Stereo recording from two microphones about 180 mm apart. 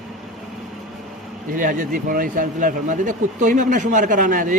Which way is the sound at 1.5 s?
50° right (ahead or behind).